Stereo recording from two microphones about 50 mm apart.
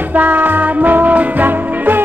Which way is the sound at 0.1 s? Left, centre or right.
Right.